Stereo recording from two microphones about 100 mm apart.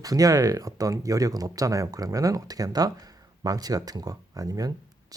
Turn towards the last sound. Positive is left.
turn(degrees=-35)  # may be behind; listen again after turning